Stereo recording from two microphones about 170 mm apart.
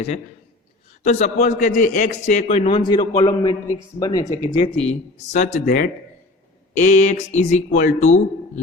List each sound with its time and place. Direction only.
1.0 s a man's voice: 40° left (ahead or behind)
2.6 s speech: 25° left (ahead or behind)
4.7 s speech: 35° left (ahead or behind)
5.6 s speech: 60° left (ahead or behind)
6.7 s a man's voice: 45° left (ahead or behind)